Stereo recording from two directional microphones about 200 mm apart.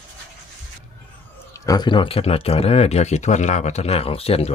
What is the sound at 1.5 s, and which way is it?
Speech, 20° left (ahead or behind).